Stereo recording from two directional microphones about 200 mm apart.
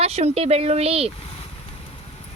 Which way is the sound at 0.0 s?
30° right (ahead or behind).